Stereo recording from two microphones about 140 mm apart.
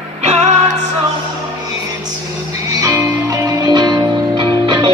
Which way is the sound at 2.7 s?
25° right (ahead or behind).